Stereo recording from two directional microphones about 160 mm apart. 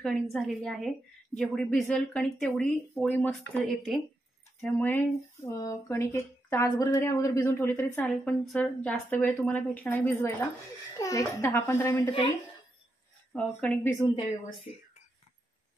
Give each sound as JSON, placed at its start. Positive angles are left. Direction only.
{"t": 0.0, "sound": "a woman's voice", "side_deg": 0}
{"t": 3.6, "sound": "a woman's voice", "side_deg": 0}
{"t": 13.3, "sound": "speech", "side_deg": 5}
{"t": 14.1, "sound": "speech", "side_deg": 35}